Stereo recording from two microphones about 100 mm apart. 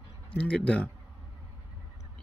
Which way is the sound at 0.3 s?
15° left (ahead or behind).